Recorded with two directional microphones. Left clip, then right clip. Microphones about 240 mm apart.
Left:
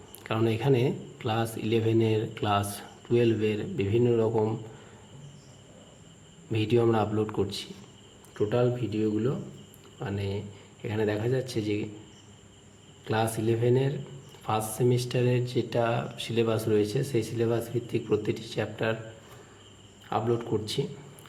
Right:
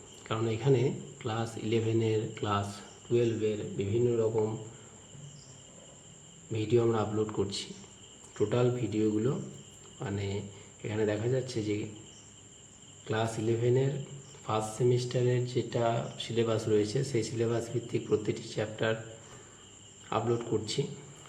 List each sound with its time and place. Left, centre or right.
0.2 s speech: left
6.5 s speech: left
13.1 s speech: centre
20.1 s speech: centre